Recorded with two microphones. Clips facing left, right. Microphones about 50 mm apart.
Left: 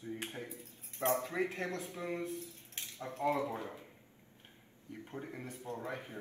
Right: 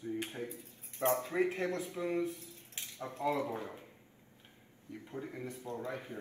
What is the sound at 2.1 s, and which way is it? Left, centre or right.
Speech, left.